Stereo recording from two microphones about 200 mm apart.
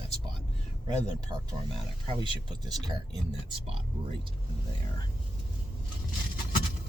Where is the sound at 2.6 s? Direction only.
20° right (ahead or behind).